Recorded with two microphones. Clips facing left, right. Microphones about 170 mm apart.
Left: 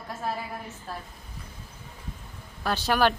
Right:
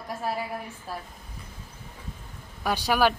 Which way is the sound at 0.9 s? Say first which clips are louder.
Right 2 dB; 10° right (ahead or behind).